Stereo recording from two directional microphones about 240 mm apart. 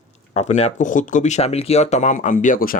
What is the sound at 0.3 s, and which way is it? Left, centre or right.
Speech, left.